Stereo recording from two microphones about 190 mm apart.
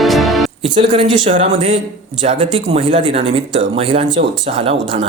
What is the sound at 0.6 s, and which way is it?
Speech, 25° right (ahead or behind).